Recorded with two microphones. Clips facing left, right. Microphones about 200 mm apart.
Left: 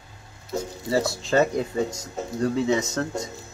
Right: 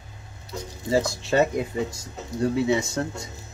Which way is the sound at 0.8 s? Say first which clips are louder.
Right 1 dB; 15° right (ahead or behind).